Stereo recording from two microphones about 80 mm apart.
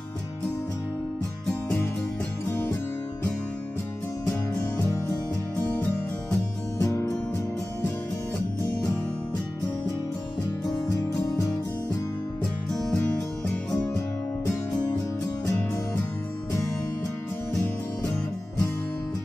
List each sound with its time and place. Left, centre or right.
6.8 s music: left
10.9 s music: left
13.9 s music: left